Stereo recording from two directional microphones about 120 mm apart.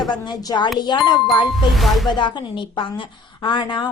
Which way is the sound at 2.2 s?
40° left (ahead or behind).